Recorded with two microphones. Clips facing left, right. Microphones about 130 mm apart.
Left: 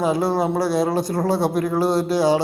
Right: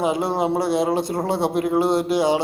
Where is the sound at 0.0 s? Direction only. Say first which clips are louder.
Left 1 dB; 20° right (ahead or behind).